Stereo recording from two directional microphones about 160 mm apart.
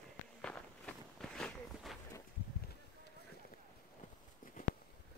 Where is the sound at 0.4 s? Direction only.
5° left (ahead or behind).